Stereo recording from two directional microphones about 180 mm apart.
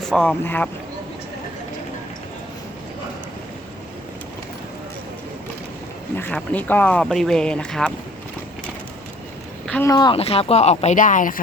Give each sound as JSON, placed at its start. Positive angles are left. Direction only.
{"t": 0.0, "sound": "speech", "side_deg": 5}
{"t": 6.1, "sound": "speech", "side_deg": 10}
{"t": 9.6, "sound": "speech", "side_deg": 10}
{"t": 9.9, "sound": "speech", "side_deg": 25}